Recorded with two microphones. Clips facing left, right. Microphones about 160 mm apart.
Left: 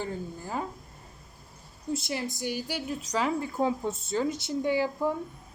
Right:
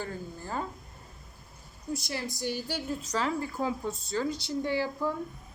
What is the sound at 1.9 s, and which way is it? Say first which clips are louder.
A woman's voice: left 3 dB; 25° left (ahead or behind).